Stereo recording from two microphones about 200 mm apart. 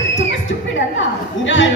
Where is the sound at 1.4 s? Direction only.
70° left (ahead or behind).